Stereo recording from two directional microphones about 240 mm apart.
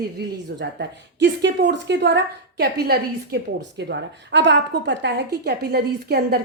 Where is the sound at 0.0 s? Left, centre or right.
Right.